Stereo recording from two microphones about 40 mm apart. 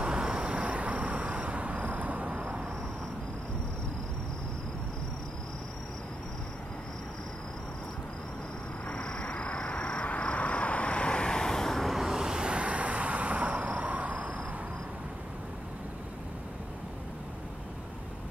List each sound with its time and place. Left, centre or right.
0.0 s vehicle: right
8.8 s vehicle: left
11.9 s vehicle: centre; by 14.3 s right